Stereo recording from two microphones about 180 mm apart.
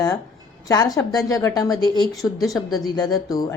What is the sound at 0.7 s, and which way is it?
A woman's voice, 20° left (ahead or behind).